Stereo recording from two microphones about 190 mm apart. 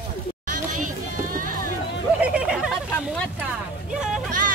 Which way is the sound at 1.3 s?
45° right (ahead or behind).